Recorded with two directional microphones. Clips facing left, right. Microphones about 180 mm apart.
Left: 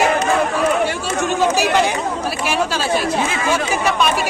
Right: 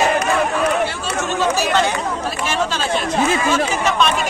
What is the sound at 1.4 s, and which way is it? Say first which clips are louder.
Chatter: left 1 dB; 15° left (ahead or behind).